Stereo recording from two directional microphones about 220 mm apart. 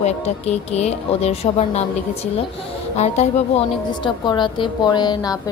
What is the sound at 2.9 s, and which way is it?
A woman's voice, 30° left (ahead or behind).